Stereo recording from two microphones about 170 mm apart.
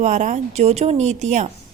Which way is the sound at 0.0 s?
45° right (ahead or behind).